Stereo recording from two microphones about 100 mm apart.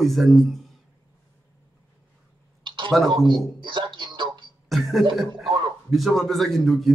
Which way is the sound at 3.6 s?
55° right (ahead or behind).